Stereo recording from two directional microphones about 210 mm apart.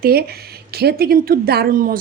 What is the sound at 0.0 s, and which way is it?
A woman's voice, 45° right (ahead or behind).